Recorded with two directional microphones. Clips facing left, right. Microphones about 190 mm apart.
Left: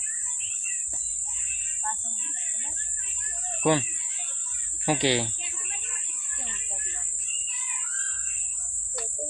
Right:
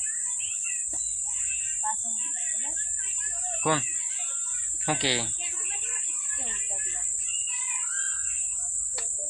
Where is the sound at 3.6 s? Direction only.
20° left (ahead or behind).